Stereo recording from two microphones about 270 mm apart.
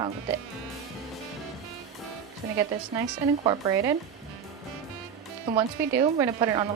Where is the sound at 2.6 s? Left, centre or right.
Centre.